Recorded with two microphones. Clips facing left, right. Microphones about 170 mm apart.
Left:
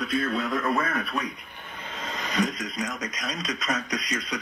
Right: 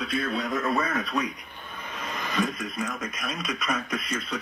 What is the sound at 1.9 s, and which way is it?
Speech, 25° left (ahead or behind).